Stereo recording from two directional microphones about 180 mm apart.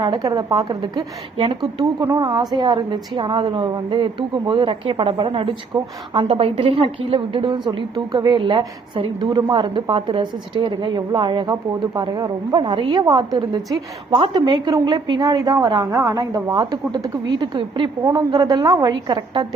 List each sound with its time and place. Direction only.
0.0 s a woman's voice: 20° right (ahead or behind)